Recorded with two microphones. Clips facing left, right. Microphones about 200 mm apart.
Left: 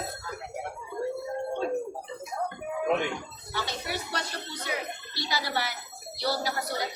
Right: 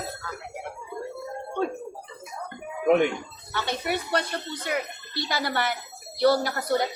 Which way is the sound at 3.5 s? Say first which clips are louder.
Right 5 dB; 60° right (ahead or behind).